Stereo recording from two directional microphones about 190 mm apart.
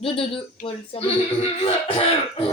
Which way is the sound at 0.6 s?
30° left (ahead or behind).